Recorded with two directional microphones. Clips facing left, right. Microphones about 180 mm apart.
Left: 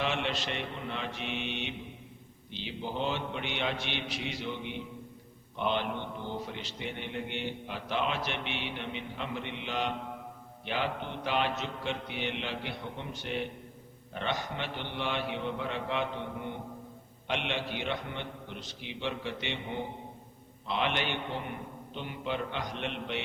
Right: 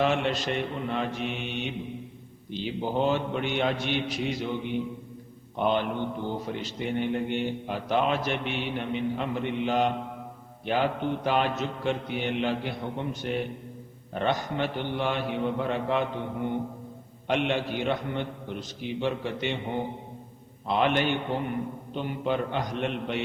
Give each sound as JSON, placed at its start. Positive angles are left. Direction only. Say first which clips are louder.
{"t": 0.0, "sound": "a man's voice", "louder": "right 7 dB", "side_deg": -45}
{"t": 17.2, "sound": "a man's voice", "louder": "right 7 dB", "side_deg": -45}
{"t": 20.7, "sound": "a man's voice", "louder": "right 7 dB", "side_deg": -45}